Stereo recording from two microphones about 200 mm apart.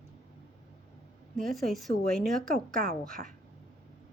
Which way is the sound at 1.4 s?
Centre (ahead or behind).